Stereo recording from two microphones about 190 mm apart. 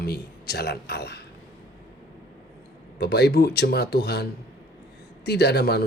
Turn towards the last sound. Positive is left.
turn(degrees=60)  # may be behind; listen again after turning